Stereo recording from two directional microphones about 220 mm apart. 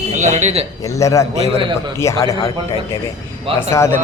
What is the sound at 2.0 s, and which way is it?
Speech, 15° left (ahead or behind).